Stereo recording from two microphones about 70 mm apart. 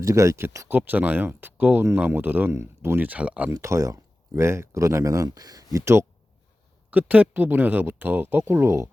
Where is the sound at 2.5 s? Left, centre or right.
Right.